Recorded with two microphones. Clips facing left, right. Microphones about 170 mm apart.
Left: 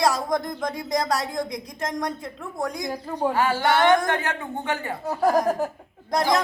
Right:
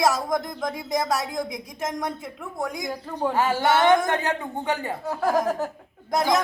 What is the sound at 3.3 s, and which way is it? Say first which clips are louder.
Speech: right 1 dB; 20° right (ahead or behind).